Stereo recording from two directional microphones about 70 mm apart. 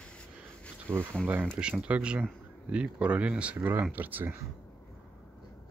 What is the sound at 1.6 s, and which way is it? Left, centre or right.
Speech, centre.